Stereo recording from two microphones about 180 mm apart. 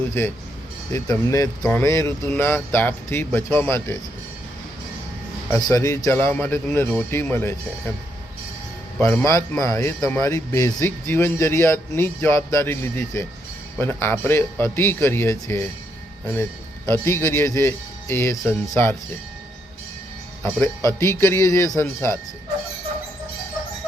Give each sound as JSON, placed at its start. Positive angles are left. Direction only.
{"t": 0.2, "sound": "speech", "side_deg": 15}
{"t": 5.5, "sound": "speech", "side_deg": 20}
{"t": 9.0, "sound": "speech", "side_deg": 15}
{"t": 20.4, "sound": "speech", "side_deg": 15}